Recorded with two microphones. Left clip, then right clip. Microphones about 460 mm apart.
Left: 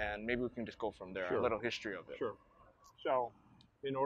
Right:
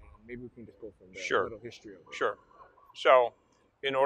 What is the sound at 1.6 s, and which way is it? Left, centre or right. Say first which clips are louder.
Speech: left 6 dB; left.